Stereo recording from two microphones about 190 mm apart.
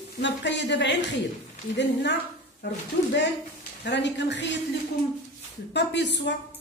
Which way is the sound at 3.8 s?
70° left (ahead or behind).